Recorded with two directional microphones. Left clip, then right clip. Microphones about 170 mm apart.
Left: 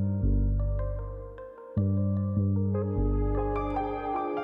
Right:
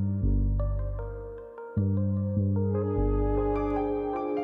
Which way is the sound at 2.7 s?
Centre (ahead or behind).